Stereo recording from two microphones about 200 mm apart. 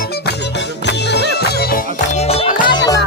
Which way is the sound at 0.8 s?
55° left (ahead or behind).